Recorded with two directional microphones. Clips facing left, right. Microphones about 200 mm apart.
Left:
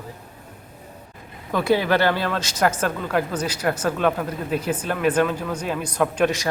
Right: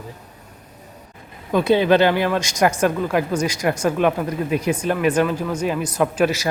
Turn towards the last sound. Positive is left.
turn(degrees=-5)  # may be behind; listen again after turning